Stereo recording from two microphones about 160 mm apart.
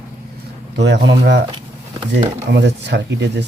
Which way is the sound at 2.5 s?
90° right.